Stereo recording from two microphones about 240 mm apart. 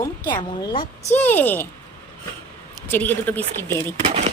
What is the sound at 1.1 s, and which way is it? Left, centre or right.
Speech, centre.